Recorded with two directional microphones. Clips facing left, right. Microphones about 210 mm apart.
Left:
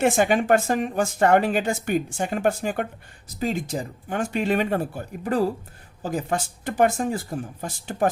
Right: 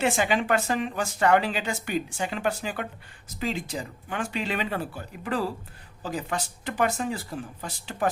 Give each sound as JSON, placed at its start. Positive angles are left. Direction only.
{"t": 0.0, "sound": "speech", "side_deg": 50}